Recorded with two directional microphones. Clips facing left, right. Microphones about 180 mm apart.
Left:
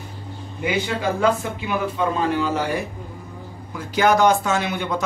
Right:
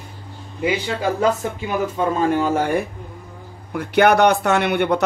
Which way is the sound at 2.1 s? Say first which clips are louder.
Right 3 dB; 45° right (ahead or behind).